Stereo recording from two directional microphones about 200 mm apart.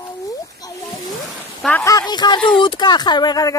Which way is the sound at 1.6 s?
10° left (ahead or behind).